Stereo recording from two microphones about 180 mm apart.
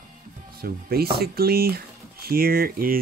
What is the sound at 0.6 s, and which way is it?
Speech, 60° right (ahead or behind).